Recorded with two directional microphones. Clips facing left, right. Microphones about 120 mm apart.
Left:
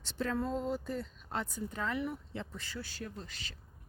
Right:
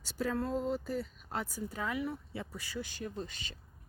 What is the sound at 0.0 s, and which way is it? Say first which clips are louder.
Speech: even; 5° right (ahead or behind).